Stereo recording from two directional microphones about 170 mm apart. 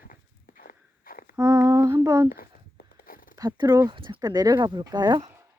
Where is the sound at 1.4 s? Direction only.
20° right (ahead or behind).